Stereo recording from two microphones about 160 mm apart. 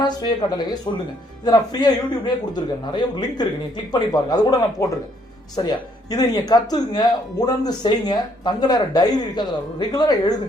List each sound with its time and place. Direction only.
0.0 s speech: 25° left (ahead or behind)